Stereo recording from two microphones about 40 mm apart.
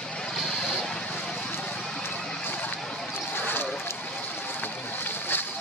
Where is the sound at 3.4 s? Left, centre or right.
Left.